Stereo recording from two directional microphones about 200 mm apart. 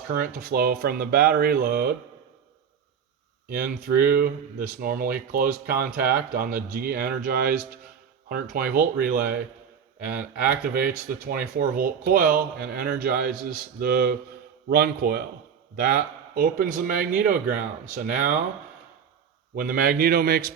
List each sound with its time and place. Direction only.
0.1 s speech: 45° right (ahead or behind)
3.5 s speech: 50° right (ahead or behind)
10.4 s speech: 45° right (ahead or behind)
19.5 s speech: 45° right (ahead or behind)